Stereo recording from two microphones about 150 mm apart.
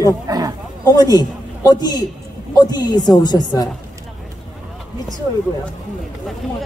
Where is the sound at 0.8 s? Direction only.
25° left (ahead or behind).